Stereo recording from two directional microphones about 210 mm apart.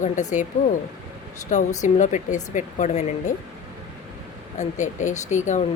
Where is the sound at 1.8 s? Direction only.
35° left (ahead or behind).